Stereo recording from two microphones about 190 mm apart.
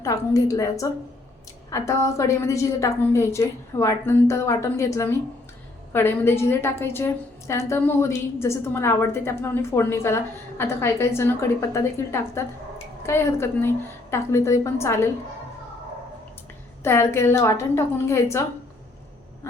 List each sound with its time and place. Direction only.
0.0 s a woman's voice: 20° left (ahead or behind)
16.8 s a woman's voice: 15° left (ahead or behind)